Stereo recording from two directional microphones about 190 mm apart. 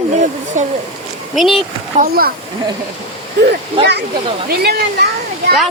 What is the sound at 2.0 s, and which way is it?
Speech, 50° right (ahead or behind).